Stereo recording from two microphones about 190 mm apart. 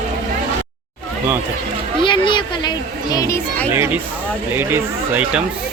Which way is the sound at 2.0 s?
25° left (ahead or behind).